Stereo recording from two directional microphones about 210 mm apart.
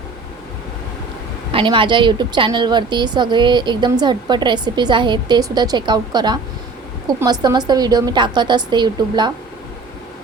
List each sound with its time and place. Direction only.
1.5 s a woman's voice: 25° right (ahead or behind)